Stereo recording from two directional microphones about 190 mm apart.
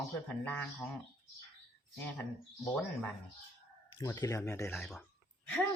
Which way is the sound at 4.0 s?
15° left (ahead or behind).